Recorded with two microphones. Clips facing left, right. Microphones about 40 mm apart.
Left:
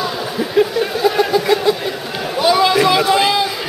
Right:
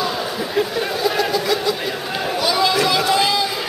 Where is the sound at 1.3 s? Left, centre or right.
Left.